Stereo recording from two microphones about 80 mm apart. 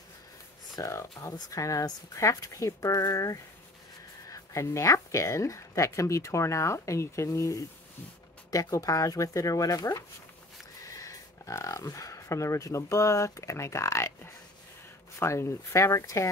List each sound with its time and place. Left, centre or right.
0.7 s a woman's voice: left
10.8 s a sound: left
15.1 s speech: left